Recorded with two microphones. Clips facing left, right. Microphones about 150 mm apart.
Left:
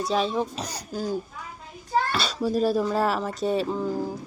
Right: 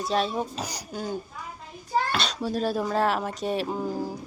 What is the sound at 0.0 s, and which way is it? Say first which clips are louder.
Speech: left 2 dB; centre (ahead or behind).